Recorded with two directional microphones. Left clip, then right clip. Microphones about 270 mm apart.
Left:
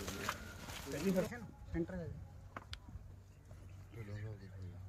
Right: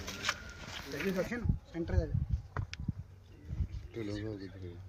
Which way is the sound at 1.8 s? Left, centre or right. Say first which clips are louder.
Right 2 dB; right.